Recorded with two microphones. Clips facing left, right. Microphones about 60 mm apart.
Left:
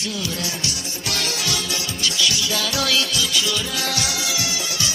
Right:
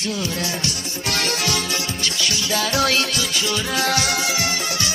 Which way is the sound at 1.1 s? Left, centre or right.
Right.